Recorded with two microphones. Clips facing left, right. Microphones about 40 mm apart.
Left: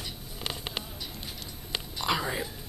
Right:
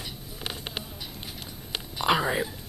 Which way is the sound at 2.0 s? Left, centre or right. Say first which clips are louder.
Right 6 dB; right.